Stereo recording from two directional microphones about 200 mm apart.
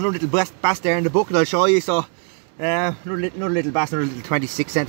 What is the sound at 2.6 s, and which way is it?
Speech, 20° left (ahead or behind).